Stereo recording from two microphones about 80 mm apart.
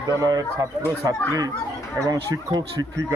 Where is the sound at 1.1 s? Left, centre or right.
Right.